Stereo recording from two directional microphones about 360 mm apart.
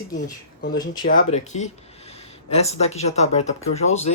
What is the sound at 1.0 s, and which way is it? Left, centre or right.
Speech, left.